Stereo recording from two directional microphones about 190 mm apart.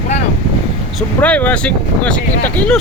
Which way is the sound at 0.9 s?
5° left (ahead or behind).